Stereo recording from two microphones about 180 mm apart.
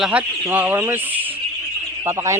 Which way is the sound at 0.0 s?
10° right (ahead or behind).